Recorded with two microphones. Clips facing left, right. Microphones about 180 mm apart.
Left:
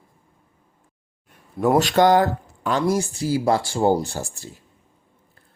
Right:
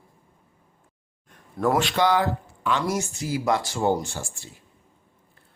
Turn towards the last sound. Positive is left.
turn(degrees=40)  # may be behind; listen again after turning